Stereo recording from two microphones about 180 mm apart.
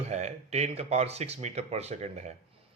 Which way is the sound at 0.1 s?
40° right (ahead or behind).